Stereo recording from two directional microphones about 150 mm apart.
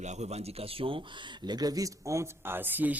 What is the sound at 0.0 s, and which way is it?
Speech, 50° right (ahead or behind).